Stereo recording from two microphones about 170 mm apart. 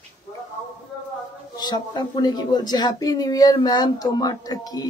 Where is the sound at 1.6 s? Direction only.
25° left (ahead or behind).